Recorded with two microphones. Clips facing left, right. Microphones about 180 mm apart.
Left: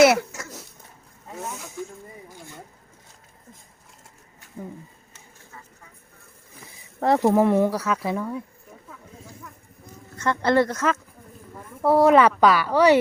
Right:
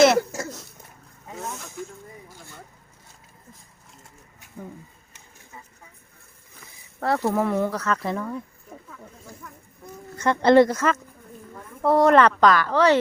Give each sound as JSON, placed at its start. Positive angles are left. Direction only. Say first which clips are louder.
{"t": 0.2, "sound": "a sound", "louder": "right 7 dB", "side_deg": -35}
{"t": 1.3, "sound": "speech", "louder": "even", "side_deg": 5}
{"t": 7.0, "sound": "speech", "louder": "left 5 dB", "side_deg": 20}
{"t": 10.2, "sound": "speech", "louder": "right 5 dB", "side_deg": -20}
{"t": 10.7, "sound": "speech", "louder": "right 1 dB", "side_deg": 0}